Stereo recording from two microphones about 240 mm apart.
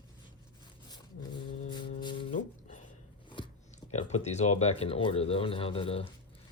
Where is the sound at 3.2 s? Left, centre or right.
Centre.